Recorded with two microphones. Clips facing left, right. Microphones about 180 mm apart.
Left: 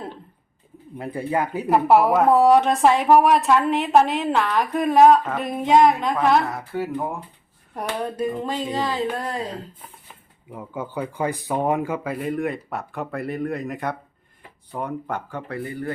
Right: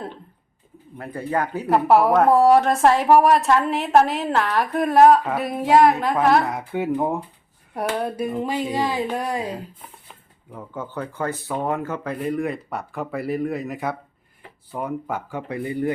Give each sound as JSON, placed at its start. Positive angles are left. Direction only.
{"t": 0.9, "sound": "speech", "side_deg": 15}
{"t": 1.6, "sound": "a woman's voice", "side_deg": 0}
{"t": 6.5, "sound": "speech", "side_deg": -20}
{"t": 7.7, "sound": "speech", "side_deg": -5}
{"t": 10.5, "sound": "a woman's voice", "side_deg": 10}